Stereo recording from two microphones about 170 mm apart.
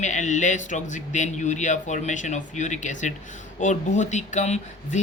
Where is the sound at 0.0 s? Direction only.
45° left (ahead or behind).